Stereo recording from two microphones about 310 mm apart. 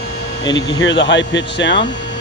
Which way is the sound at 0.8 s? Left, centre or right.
Left.